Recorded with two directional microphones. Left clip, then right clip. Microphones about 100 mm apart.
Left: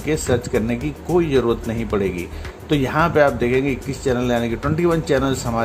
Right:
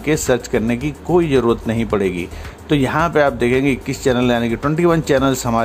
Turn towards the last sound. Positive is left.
turn(degrees=-30)  # may be behind; listen again after turning